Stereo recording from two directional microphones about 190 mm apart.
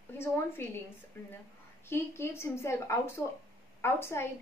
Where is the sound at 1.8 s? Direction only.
10° left (ahead or behind).